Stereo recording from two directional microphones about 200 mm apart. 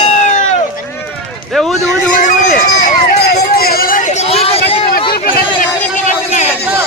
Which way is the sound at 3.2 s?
50° left (ahead or behind).